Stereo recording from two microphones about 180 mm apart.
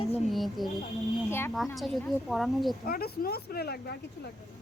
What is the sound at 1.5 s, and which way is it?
Speech, centre (ahead or behind).